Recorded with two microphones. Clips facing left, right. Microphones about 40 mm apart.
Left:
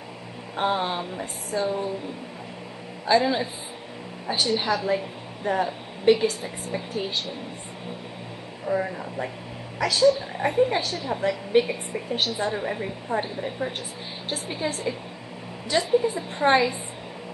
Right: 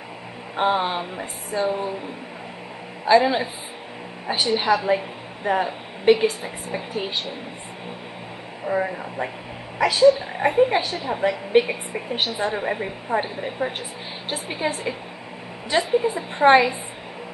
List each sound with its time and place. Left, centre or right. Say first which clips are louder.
0.6 s speech: right 3 dB; centre
3.1 s a woman's voice: right 4 dB; centre
8.6 s a woman's voice: right 2 dB; right